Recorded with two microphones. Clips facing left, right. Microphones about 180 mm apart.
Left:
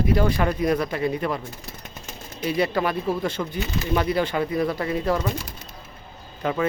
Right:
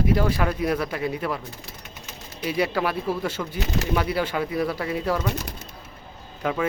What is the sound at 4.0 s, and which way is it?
Speech, 10° right (ahead or behind).